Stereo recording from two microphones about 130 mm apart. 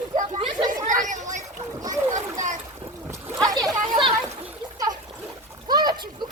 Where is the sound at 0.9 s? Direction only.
85° right.